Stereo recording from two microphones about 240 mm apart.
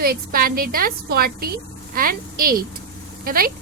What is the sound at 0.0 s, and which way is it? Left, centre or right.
A woman's voice, right.